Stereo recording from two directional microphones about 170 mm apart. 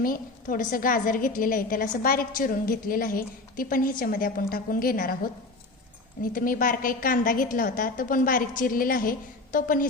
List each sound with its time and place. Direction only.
0.0 s a woman's voice: 55° left (ahead or behind)
6.3 s a woman's voice: 55° left (ahead or behind)